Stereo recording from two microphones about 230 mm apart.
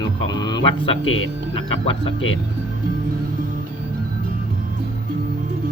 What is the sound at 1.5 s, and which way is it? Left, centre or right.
Speech, left.